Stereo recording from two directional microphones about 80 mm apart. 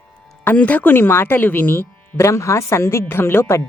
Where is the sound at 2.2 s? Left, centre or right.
Left.